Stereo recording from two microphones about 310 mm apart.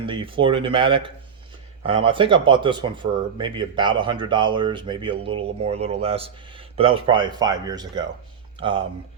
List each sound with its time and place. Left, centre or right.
0.0 s speech: centre